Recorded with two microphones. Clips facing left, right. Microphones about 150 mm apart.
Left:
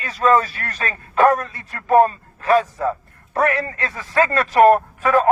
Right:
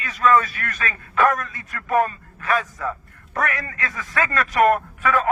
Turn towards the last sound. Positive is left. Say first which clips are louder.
# left 4 dB
turn(degrees=35)  # may be behind; listen again after turning